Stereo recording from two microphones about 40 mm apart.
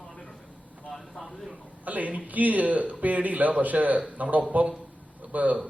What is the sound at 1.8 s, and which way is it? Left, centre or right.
A man's voice, right.